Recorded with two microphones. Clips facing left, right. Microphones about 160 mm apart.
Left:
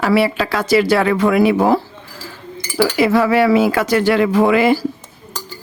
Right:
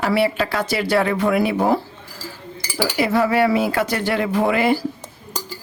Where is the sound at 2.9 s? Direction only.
90° left.